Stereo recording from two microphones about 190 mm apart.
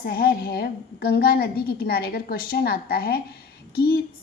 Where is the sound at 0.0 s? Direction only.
50° left (ahead or behind).